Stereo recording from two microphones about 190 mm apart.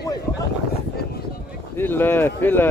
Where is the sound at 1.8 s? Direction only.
10° left (ahead or behind).